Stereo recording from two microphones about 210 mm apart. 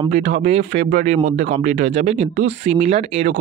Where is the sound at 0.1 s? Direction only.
35° right (ahead or behind).